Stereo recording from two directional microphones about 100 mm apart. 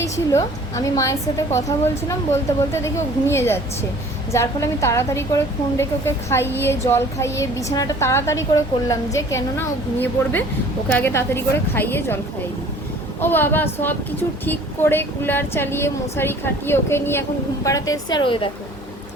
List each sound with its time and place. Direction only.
0.0 s a woman's voice: 35° left (ahead or behind)
10.8 s a woman's voice: 15° left (ahead or behind); by 18.2 s 35° left (ahead or behind)
18.2 s speech: 55° left (ahead or behind)